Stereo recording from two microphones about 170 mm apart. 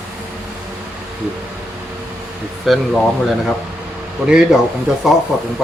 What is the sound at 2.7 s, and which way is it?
Speech, centre (ahead or behind).